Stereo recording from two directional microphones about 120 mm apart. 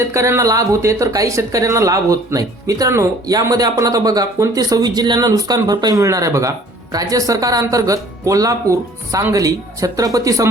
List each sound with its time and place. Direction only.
0.0 s speech: 25° right (ahead or behind)